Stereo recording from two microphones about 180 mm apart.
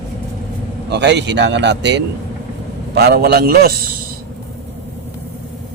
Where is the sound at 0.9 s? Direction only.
75° right (ahead or behind).